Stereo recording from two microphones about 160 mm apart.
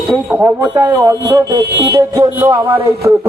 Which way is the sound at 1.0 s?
20° right (ahead or behind).